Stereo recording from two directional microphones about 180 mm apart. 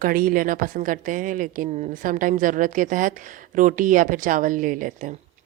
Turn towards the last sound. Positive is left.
turn(degrees=-45)  # may be behind; listen again after turning